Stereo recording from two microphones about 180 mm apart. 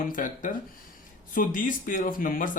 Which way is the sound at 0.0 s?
50° left (ahead or behind).